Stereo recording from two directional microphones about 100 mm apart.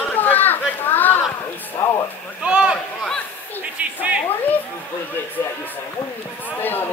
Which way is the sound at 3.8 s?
15° right (ahead or behind).